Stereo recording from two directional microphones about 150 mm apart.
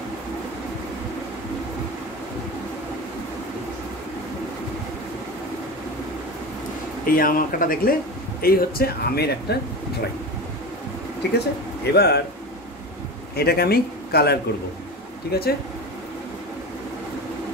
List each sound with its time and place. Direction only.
7.1 s speech: 70° left (ahead or behind)
8.4 s speech: 85° left
11.3 s speech: 90° left
13.4 s speech: 90° left